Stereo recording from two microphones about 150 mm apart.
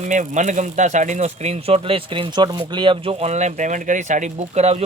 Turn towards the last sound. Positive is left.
turn(degrees=-45)  # may be behind; listen again after turning